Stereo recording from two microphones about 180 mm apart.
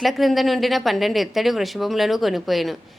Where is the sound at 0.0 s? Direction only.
Centre (ahead or behind).